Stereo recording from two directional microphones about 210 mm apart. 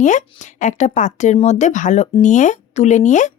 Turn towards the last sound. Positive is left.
turn(degrees=35)  # may be behind; listen again after turning